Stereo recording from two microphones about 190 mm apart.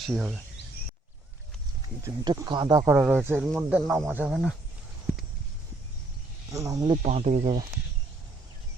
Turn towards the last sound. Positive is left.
turn(degrees=-40)  # may be behind; listen again after turning